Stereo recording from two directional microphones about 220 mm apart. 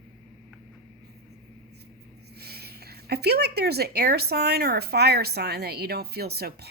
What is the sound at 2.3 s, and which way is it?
A woman's voice, 45° right (ahead or behind).